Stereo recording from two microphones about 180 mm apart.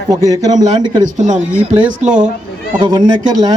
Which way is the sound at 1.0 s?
40° right (ahead or behind).